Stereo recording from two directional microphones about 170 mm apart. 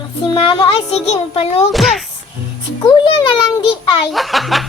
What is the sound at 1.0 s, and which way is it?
Speech, 35° left (ahead or behind).